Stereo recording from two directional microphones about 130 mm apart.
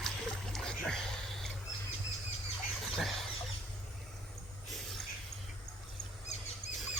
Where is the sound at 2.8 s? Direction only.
Centre (ahead or behind).